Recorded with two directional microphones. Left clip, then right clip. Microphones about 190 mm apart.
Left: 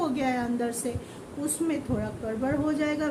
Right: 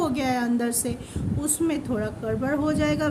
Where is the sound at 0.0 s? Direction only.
50° right (ahead or behind).